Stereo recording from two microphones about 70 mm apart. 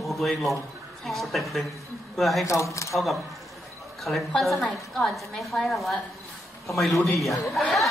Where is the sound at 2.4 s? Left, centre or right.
Left.